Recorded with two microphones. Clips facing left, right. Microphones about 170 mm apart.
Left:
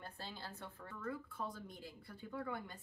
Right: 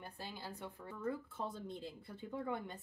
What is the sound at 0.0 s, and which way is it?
Speech, 15° right (ahead or behind).